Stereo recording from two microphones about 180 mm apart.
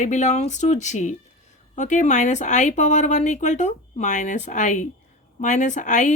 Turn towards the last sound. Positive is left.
turn(degrees=40)  # may be behind; listen again after turning